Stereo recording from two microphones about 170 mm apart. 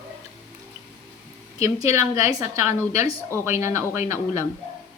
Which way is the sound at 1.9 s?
15° right (ahead or behind).